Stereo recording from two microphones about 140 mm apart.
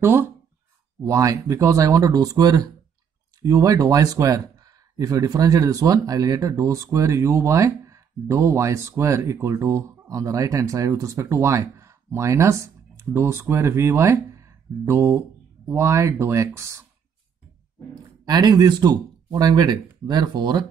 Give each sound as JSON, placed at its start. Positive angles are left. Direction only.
{"t": 0.0, "sound": "speech", "side_deg": -15}
{"t": 18.2, "sound": "speech", "side_deg": -30}